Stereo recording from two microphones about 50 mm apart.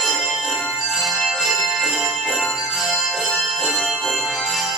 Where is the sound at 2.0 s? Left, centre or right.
Centre.